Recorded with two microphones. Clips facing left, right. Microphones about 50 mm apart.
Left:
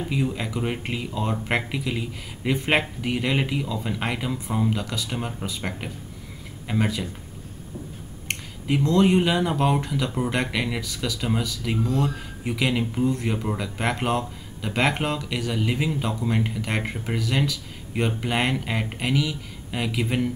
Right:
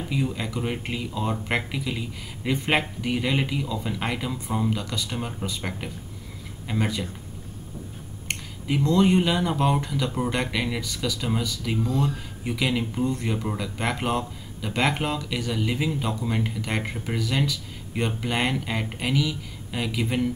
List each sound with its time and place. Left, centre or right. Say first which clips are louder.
0.1 s speech: right 1 dB; centre
8.3 s speech: left 2 dB; centre